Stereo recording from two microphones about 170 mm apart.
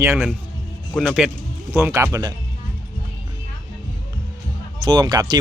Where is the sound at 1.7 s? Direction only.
15° right (ahead or behind).